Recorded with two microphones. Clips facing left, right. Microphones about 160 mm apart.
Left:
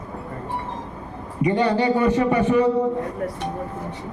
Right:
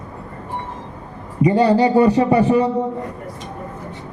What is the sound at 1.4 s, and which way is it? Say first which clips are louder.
A man's voice: right 5 dB; 35° right (ahead or behind).